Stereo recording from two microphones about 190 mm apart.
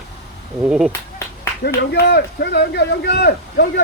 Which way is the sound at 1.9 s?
60° left (ahead or behind).